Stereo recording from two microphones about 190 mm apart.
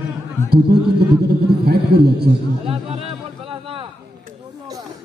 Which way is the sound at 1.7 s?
55° right (ahead or behind).